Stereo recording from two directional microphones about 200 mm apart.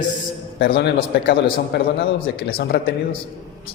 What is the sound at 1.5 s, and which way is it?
A man's voice, 50° left (ahead or behind).